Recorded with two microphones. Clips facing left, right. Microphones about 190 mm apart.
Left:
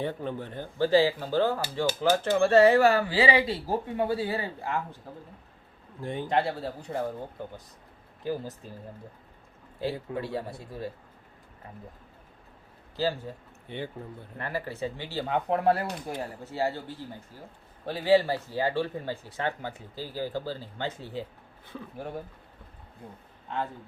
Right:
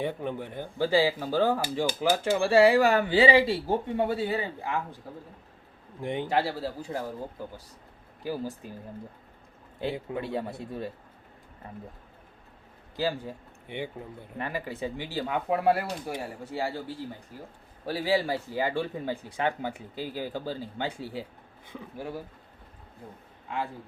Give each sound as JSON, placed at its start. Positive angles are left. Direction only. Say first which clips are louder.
{"t": 0.0, "sound": "speech", "louder": "right 1 dB", "side_deg": -15}
{"t": 6.0, "sound": "speech", "louder": "right 2 dB", "side_deg": -20}
{"t": 6.2, "sound": "speech", "louder": "left 2 dB", "side_deg": -5}
{"t": 8.2, "sound": "speech", "louder": "even", "side_deg": -10}
{"t": 9.8, "sound": "speech", "louder": "even", "side_deg": -20}
{"t": 13.0, "sound": "speech", "louder": "even", "side_deg": -15}
{"t": 17.8, "sound": "speech", "louder": "left 4 dB", "side_deg": -10}